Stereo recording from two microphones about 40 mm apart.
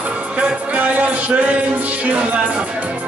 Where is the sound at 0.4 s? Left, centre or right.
Right.